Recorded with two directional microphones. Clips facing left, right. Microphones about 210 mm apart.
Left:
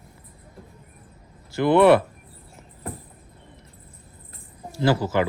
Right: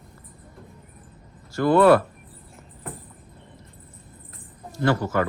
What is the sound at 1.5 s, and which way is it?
Speech, 25° left (ahead or behind).